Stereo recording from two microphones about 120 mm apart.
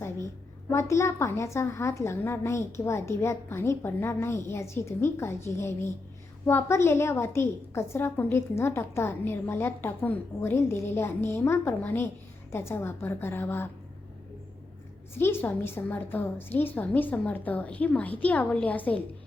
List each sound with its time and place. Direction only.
0.7 s a woman's voice: 25° left (ahead or behind)
15.2 s a woman's voice: 20° left (ahead or behind)